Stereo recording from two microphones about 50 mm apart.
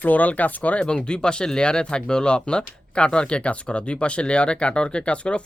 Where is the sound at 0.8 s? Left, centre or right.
Centre.